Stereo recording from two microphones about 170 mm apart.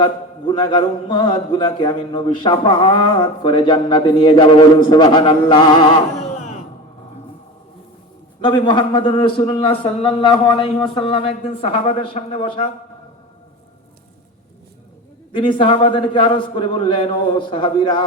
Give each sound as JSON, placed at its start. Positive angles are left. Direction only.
{"t": 0.0, "sound": "a man's voice", "side_deg": 30}
{"t": 8.4, "sound": "a man's voice", "side_deg": 30}
{"t": 15.3, "sound": "a man's voice", "side_deg": 30}